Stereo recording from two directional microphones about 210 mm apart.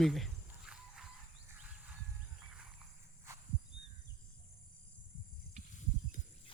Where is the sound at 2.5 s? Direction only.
5° right (ahead or behind).